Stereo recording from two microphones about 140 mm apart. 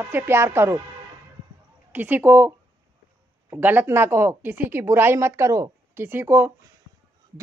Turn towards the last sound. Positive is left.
turn(degrees=-15)  # may be behind; listen again after turning